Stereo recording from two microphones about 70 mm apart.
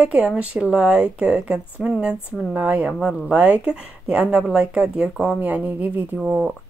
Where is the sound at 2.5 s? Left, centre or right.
Right.